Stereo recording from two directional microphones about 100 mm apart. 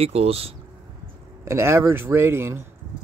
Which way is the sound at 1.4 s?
25° right (ahead or behind).